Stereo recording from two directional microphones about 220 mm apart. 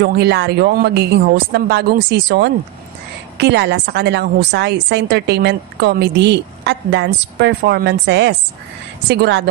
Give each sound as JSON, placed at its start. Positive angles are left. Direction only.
{"t": 0.0, "sound": "a woman's voice", "side_deg": -50}